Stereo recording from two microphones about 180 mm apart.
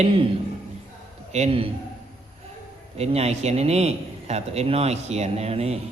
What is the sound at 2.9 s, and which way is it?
A man's voice, 35° right (ahead or behind).